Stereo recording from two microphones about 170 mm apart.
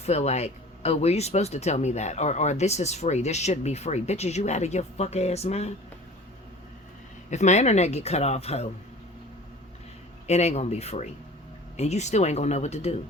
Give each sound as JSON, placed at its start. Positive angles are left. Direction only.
{"t": 0.0, "sound": "speech", "side_deg": 40}
{"t": 7.3, "sound": "speech", "side_deg": 45}
{"t": 10.2, "sound": "speech", "side_deg": 40}